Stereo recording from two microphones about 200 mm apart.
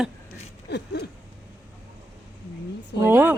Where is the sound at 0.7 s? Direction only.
55° left (ahead or behind).